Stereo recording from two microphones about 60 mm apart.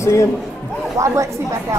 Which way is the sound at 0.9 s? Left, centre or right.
Right.